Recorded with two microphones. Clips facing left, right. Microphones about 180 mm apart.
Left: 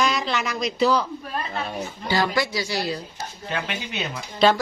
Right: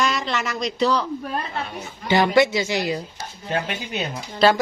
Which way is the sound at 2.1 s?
25° right (ahead or behind).